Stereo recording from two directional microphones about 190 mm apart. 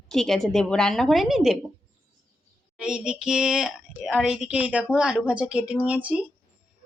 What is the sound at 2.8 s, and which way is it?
A woman's voice, 5° right (ahead or behind).